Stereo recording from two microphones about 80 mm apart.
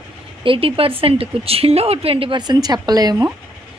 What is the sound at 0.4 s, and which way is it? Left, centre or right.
Speech, right.